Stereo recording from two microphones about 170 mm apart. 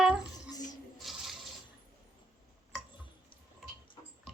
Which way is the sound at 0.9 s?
Centre (ahead or behind).